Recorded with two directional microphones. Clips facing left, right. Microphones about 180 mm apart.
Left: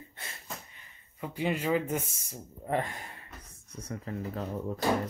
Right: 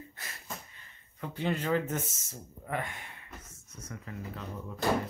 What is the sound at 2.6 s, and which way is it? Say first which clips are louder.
Speech: left 5 dB; 30° left (ahead or behind).